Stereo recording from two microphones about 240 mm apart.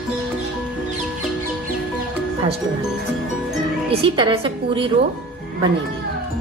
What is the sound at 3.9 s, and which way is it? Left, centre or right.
Speech, right.